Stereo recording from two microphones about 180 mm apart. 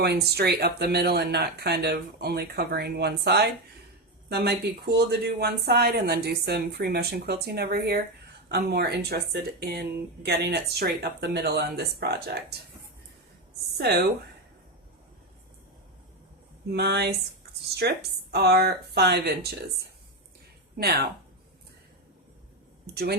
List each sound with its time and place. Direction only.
0.0 s speech: 65° right (ahead or behind)
13.7 s speech: 65° right (ahead or behind)
16.7 s speech: 65° right (ahead or behind)
20.7 s speech: 60° right (ahead or behind)